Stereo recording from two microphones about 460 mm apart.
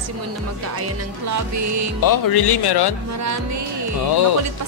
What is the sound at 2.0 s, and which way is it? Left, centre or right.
Speech, left.